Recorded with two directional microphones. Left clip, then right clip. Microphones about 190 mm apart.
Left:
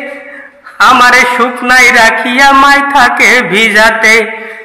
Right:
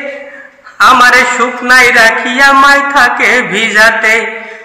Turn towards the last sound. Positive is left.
turn(degrees=40)  # may be behind; listen again after turning